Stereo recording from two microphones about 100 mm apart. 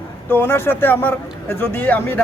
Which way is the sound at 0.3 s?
20° left (ahead or behind).